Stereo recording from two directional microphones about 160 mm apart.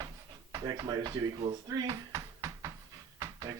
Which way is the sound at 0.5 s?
25° right (ahead or behind).